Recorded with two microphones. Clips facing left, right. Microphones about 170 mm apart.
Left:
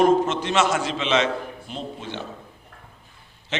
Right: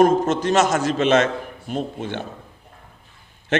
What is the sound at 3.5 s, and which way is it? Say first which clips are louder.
Speech: right 9 dB; 55° right (ahead or behind).